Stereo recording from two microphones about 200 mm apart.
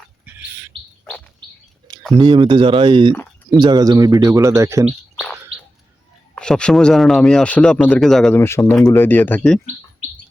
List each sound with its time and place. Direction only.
2.1 s speech: 25° right (ahead or behind)
3.1 s a sound: centre (ahead or behind)
3.6 s speech: 20° right (ahead or behind)
4.9 s bird: centre (ahead or behind)
6.3 s speech: 5° left (ahead or behind)